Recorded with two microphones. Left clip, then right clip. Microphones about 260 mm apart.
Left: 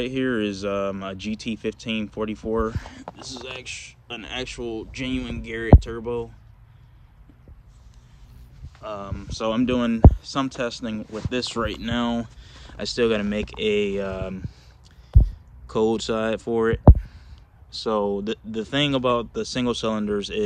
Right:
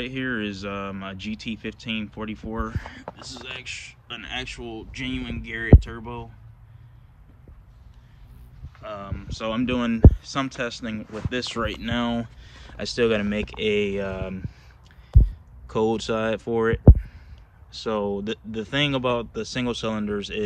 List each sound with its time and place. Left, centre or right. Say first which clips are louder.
0.0 s speech: left 4 dB; centre
8.7 s speech: left 2 dB; centre
15.0 s heart sounds: even; centre
17.6 s speech: left 3 dB; centre